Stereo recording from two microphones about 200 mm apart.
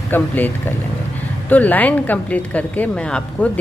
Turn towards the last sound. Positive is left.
turn(degrees=5)  # may be behind; listen again after turning